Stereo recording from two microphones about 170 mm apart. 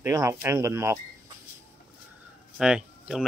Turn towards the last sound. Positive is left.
turn(degrees=-5)  # may be behind; listen again after turning